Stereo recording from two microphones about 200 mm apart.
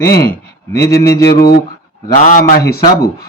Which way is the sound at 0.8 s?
50° left (ahead or behind).